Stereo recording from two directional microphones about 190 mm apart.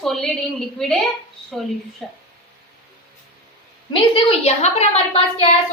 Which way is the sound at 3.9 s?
30° left (ahead or behind).